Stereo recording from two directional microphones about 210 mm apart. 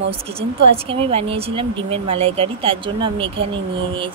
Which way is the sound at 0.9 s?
25° right (ahead or behind).